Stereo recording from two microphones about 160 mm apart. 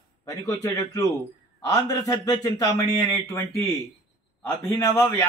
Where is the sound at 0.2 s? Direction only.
20° left (ahead or behind).